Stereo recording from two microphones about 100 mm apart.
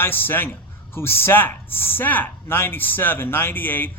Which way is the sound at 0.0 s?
20° left (ahead or behind).